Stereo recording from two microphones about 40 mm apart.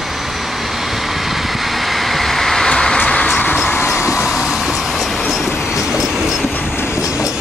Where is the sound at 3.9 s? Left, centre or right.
Centre.